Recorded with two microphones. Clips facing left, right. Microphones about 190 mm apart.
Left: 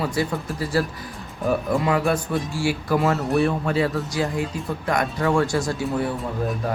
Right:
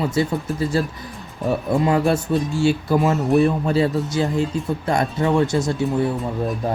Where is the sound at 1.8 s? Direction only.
30° right (ahead or behind).